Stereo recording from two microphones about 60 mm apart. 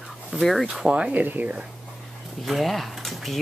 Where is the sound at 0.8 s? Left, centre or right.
Centre.